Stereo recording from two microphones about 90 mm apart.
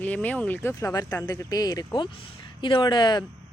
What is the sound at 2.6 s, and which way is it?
Speech, 60° left (ahead or behind).